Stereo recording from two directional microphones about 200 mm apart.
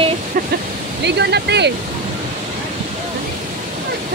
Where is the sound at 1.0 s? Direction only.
55° right (ahead or behind).